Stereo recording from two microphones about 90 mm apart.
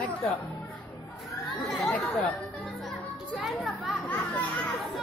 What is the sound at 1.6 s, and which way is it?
Chatter, 5° left (ahead or behind).